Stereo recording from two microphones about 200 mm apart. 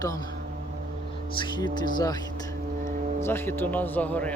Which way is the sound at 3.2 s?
10° left (ahead or behind).